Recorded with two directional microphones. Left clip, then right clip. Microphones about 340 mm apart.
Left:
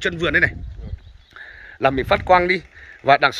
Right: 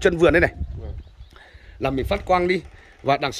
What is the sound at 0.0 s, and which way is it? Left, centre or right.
Speech, centre.